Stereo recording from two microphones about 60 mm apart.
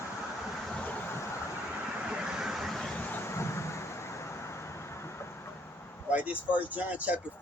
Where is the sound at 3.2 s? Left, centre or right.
Left.